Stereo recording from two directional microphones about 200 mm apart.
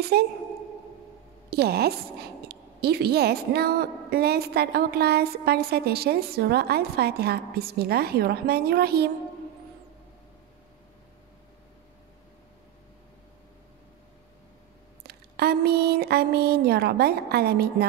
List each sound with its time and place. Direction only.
0.0 s a woman's voice: 55° right (ahead or behind)
1.5 s a woman's voice: 55° right (ahead or behind)
15.0 s speech: 50° right (ahead or behind)